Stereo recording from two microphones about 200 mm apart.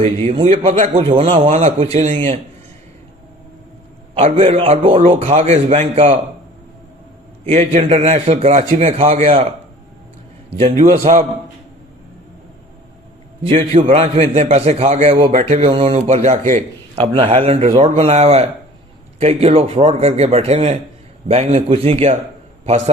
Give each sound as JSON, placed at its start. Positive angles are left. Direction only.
{"t": 0.0, "sound": "a man's voice", "side_deg": -30}
{"t": 4.1, "sound": "a man's voice", "side_deg": -30}
{"t": 7.4, "sound": "a man's voice", "side_deg": -30}
{"t": 10.5, "sound": "a man's voice", "side_deg": -30}
{"t": 13.5, "sound": "a man's voice", "side_deg": -30}
{"t": 16.9, "sound": "a man's voice", "side_deg": -25}